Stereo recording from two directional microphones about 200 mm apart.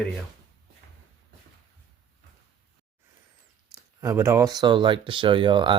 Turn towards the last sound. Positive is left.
turn(degrees=-25)  # may be behind; listen again after turning